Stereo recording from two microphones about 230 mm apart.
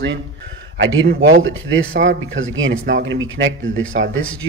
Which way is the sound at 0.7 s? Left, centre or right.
Right.